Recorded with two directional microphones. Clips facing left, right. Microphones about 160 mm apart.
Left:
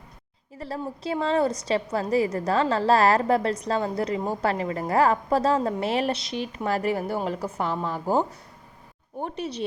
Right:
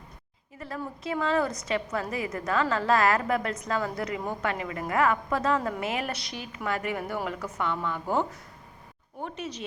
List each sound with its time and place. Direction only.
0.6 s a woman's voice: 30° left (ahead or behind)